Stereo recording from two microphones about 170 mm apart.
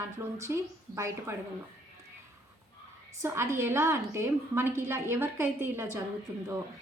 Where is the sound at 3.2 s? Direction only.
15° right (ahead or behind).